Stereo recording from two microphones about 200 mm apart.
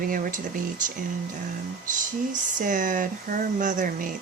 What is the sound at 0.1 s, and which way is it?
Speech, 40° right (ahead or behind).